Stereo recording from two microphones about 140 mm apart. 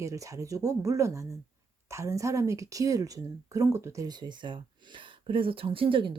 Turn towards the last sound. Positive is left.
turn(degrees=-40)  # may be behind; listen again after turning